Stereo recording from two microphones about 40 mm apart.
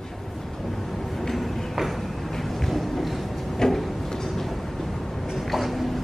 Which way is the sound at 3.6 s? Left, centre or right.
Centre.